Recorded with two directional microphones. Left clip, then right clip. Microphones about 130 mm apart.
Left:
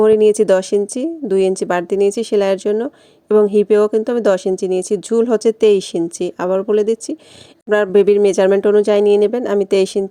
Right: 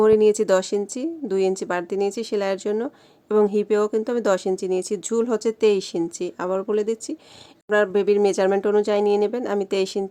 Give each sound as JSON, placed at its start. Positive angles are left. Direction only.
{"t": 0.0, "sound": "speech", "side_deg": 30}